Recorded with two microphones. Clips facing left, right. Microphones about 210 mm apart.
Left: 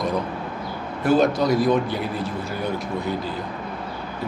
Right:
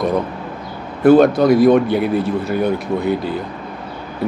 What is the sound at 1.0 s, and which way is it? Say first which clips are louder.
Speech: right 8 dB; 55° right (ahead or behind).